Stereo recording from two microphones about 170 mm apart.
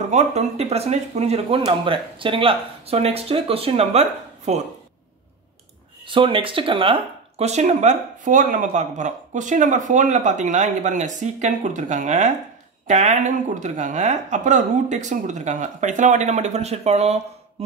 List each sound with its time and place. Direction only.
0.1 s speech: 40° right (ahead or behind)
6.0 s speech: 30° right (ahead or behind)